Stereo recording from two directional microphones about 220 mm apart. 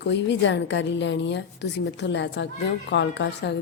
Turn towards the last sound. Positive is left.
turn(degrees=50)  # may be behind; listen again after turning